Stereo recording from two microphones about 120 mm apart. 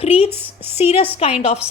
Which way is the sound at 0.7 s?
60° left (ahead or behind).